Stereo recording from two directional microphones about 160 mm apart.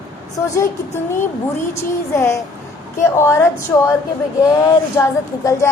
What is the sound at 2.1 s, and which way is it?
A woman's voice, 20° left (ahead or behind).